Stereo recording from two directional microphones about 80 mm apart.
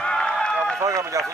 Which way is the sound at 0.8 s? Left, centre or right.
Right.